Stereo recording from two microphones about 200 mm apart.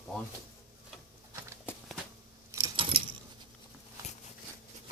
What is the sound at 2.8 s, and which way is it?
Keys jangling, 25° right (ahead or behind).